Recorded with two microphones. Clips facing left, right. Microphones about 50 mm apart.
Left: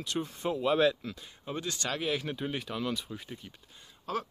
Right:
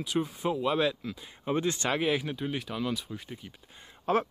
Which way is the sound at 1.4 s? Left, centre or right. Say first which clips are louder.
Right 6 dB; right.